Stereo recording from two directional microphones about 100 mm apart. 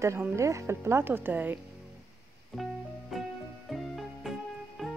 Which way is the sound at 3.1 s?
Centre (ahead or behind).